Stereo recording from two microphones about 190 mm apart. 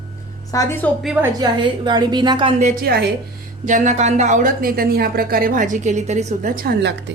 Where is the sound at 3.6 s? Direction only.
40° right (ahead or behind); by 7.1 s 60° right (ahead or behind).